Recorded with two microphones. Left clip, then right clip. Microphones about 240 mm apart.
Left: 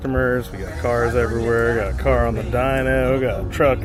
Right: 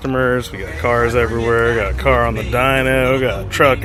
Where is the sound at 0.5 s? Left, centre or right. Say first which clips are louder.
Right 5 dB; centre.